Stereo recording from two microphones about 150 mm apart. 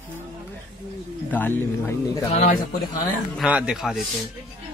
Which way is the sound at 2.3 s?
45° left (ahead or behind).